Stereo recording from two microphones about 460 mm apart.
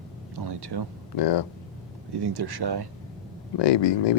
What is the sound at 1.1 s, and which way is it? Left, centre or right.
Speech, left.